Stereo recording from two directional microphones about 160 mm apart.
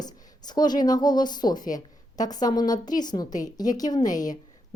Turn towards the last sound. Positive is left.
turn(degrees=25)  # may be behind; listen again after turning